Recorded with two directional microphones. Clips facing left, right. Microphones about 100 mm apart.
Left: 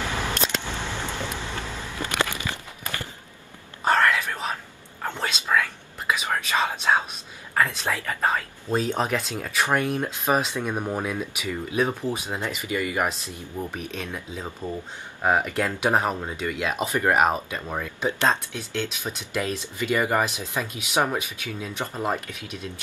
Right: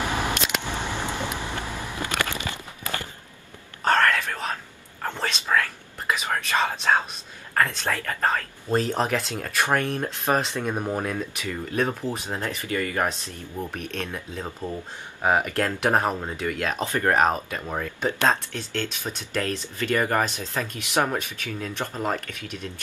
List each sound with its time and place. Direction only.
0.0 s vehicle: 15° right (ahead or behind)
3.8 s whispering: 10° left (ahead or behind)
8.7 s speech: centre (ahead or behind)